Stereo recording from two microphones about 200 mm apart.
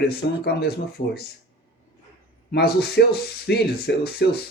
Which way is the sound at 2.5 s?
55° left (ahead or behind).